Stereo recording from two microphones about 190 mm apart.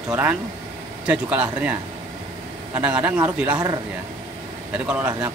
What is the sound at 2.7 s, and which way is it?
Speech, 5° right (ahead or behind).